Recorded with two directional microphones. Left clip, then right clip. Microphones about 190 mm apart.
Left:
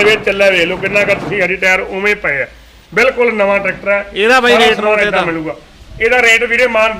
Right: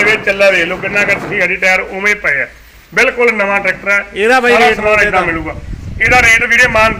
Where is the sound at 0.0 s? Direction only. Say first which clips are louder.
Even; 65° left (ahead or behind).